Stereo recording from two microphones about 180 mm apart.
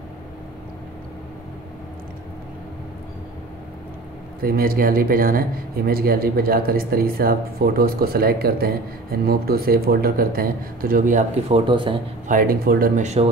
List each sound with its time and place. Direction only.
4.4 s speech: 55° right (ahead or behind)
11.5 s speech: 30° right (ahead or behind)
12.3 s speech: 50° right (ahead or behind)